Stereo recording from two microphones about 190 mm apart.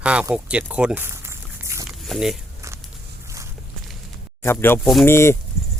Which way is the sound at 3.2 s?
15° right (ahead or behind).